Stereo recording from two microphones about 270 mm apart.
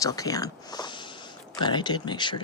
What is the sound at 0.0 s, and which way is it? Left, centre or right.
Speech, centre.